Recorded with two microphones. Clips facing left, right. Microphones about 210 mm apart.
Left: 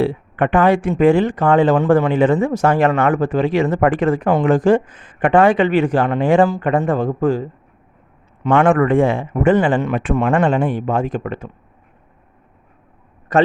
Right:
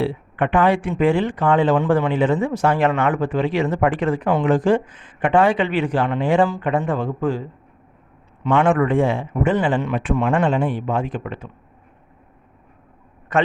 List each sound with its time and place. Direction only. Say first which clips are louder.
0.0 s speech: left 4 dB; 45° left (ahead or behind)
8.4 s speech: left 3 dB; 50° left (ahead or behind)
13.3 s a man's voice: left 5 dB; 35° left (ahead or behind)